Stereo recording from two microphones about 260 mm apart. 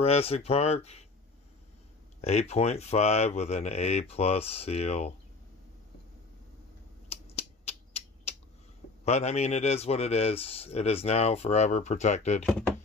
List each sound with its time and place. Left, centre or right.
0.0 s speech: left
2.2 s speech: left
7.1 s a sound: left
9.0 s speech: left